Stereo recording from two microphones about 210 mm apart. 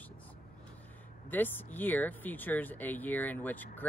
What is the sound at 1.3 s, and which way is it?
Speech, 10° left (ahead or behind).